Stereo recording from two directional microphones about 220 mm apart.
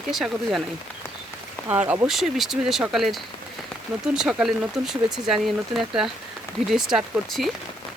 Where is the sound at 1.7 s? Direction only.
10° right (ahead or behind).